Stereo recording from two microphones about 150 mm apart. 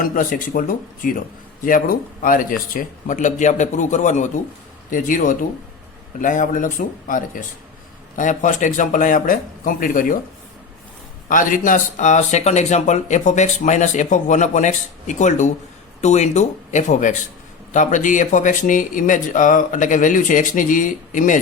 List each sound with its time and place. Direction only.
0.0 s speech: 65° left (ahead or behind)
11.3 s speech: 60° left (ahead or behind)